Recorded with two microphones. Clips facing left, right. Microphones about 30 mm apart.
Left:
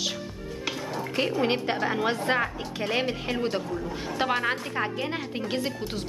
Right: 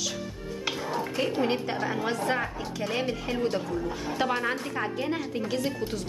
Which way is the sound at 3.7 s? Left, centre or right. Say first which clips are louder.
Right 1 dB; centre.